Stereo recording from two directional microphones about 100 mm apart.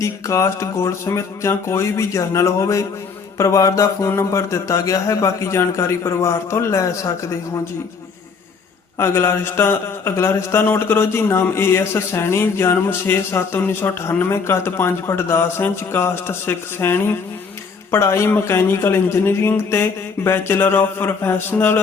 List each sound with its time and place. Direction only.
0.0 s a man's voice: 30° left (ahead or behind)
9.0 s a man's voice: 25° left (ahead or behind)